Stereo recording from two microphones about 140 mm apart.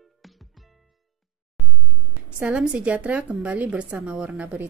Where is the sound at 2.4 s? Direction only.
10° right (ahead or behind).